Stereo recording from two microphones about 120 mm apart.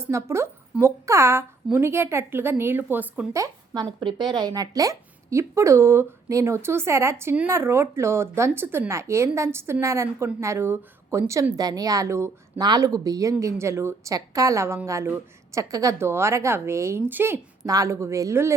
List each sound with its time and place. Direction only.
0.0 s a woman's voice: 25° right (ahead or behind)
3.3 s a woman's voice: 30° right (ahead or behind)
4.0 s a woman's voice: 40° right (ahead or behind); by 17.4 s 15° right (ahead or behind)
17.7 s a woman's voice: 25° right (ahead or behind)